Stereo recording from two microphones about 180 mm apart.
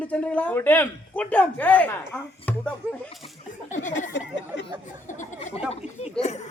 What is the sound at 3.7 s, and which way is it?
Speech, 45° left (ahead or behind).